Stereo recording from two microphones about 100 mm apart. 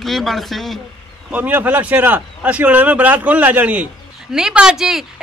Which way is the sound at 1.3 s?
15° right (ahead or behind).